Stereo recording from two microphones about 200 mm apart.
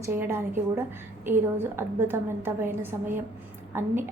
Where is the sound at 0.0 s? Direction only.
10° right (ahead or behind).